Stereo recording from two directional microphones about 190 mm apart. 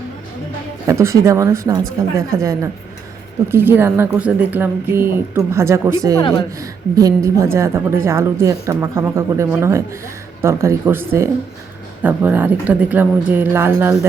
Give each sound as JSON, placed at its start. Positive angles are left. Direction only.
{"t": 0.9, "sound": "a woman's voice", "side_deg": -15}
{"t": 6.1, "sound": "speech", "side_deg": 20}
{"t": 6.6, "sound": "a woman's voice", "side_deg": -15}